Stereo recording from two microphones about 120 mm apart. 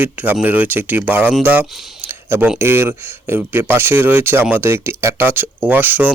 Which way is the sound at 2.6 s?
20° right (ahead or behind).